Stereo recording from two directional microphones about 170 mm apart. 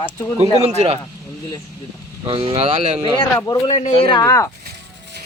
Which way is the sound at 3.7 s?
45° left (ahead or behind).